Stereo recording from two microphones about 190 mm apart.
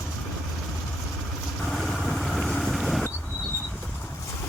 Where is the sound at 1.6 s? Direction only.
Centre (ahead or behind).